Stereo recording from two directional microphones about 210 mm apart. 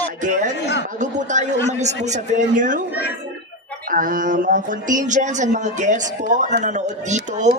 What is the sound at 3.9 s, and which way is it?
Speech, 40° right (ahead or behind).